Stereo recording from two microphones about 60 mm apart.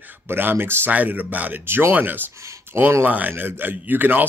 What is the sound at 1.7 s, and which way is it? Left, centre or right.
Speech, right.